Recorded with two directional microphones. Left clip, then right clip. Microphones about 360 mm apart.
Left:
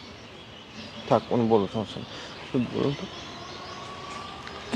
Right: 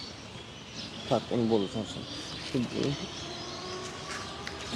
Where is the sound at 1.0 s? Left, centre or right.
Left.